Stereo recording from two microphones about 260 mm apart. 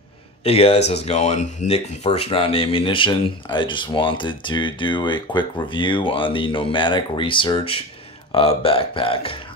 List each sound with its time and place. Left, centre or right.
0.4 s speech: left